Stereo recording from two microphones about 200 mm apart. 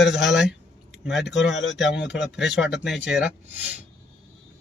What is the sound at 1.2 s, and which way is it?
Speech, 60° left (ahead or behind).